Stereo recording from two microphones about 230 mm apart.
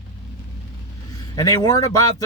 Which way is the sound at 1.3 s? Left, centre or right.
Centre.